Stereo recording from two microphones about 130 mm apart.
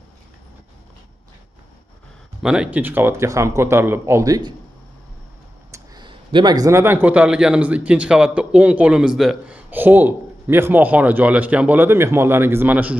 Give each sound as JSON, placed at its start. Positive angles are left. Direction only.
{"t": 2.4, "sound": "speech", "side_deg": -5}
{"t": 5.7, "sound": "a man's voice", "side_deg": -35}
{"t": 9.7, "sound": "a man's voice", "side_deg": -15}